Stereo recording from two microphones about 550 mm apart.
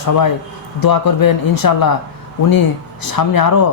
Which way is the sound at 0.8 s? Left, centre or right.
Left.